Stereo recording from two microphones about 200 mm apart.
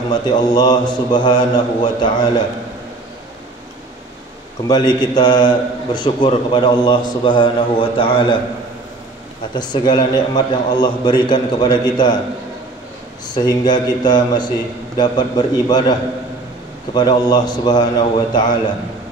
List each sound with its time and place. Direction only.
0.1 s a man's voice: 20° left (ahead or behind)
4.6 s a man's voice: 20° left (ahead or behind)
9.5 s a man's voice: 20° left (ahead or behind)
13.3 s a man's voice: 20° left (ahead or behind)